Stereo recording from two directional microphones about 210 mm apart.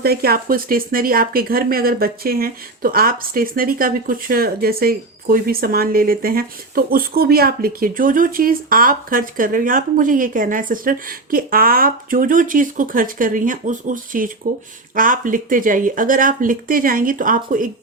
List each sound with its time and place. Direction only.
0.0 s speech: 45° right (ahead or behind)